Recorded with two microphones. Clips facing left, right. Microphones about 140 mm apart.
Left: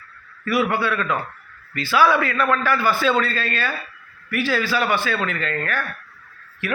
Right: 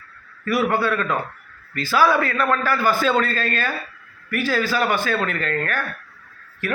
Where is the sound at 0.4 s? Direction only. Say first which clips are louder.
Right 1 dB; 45° right (ahead or behind).